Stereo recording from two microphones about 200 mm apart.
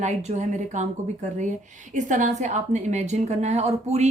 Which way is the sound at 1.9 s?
40° right (ahead or behind).